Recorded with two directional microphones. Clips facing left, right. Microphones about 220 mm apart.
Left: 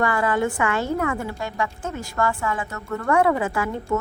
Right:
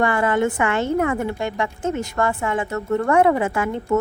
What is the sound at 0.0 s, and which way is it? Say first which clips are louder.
A woman's voice: right 3 dB; 25° right (ahead or behind).